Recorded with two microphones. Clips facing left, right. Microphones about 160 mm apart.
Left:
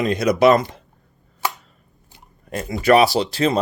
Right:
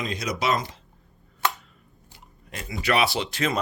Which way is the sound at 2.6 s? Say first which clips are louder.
Left 9 dB; 45° left (ahead or behind).